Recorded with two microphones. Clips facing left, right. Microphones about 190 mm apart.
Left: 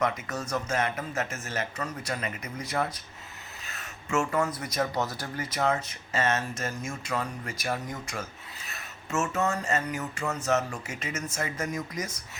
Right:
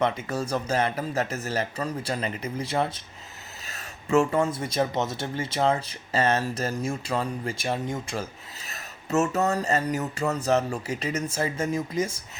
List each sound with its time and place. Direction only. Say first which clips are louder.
0.0 s speech: right 4 dB; 30° right (ahead or behind)